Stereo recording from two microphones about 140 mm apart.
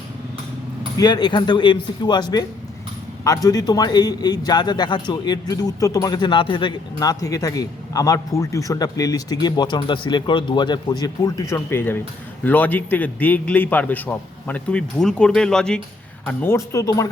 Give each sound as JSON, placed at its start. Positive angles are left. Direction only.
{"t": 0.9, "sound": "a man's voice", "side_deg": 30}
{"t": 16.2, "sound": "a man's voice", "side_deg": 15}